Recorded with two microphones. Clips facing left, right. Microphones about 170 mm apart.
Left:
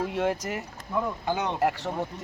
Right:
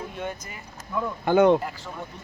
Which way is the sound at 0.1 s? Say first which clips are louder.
Left 7 dB; 80° left.